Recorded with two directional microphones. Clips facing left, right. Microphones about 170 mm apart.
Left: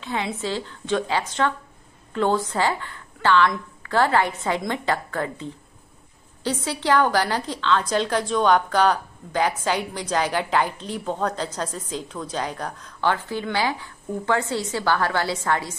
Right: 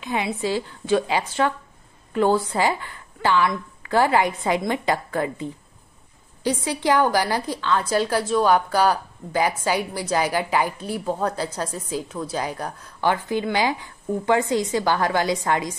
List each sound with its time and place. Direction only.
0.0 s a woman's voice: 10° right (ahead or behind)